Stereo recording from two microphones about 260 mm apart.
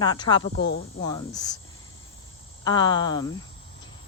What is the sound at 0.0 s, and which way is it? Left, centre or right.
Speech, centre.